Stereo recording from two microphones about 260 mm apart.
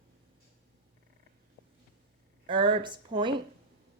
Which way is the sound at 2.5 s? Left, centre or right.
Centre.